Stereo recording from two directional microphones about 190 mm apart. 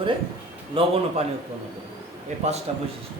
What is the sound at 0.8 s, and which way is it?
Speech, 30° right (ahead or behind).